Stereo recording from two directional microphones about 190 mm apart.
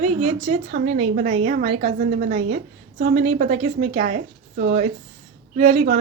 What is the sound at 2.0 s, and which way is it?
A woman's voice, 50° right (ahead or behind).